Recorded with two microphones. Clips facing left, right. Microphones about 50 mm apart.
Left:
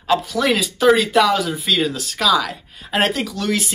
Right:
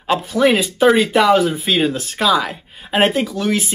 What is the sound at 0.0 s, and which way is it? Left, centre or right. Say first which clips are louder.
Speech: right 3 dB; right.